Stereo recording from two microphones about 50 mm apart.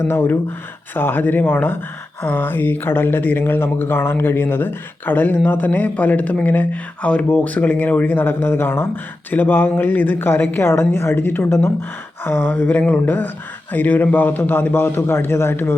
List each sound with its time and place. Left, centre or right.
0.0 s a woman's voice: left
0.9 s a sound: left
7.3 s a woman's voice: left
9.3 s a woman's voice: left
11.1 s a woman's voice: left
12.5 s a sound: left